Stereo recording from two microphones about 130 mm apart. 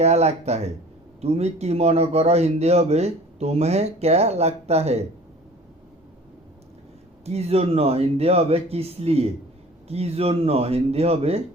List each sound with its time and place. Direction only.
0.0 s speech: 55° right (ahead or behind)
7.3 s speech: 55° right (ahead or behind)